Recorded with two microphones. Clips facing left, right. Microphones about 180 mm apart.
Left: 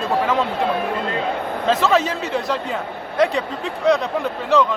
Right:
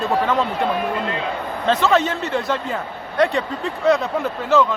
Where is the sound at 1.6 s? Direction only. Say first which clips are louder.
Even; centre (ahead or behind).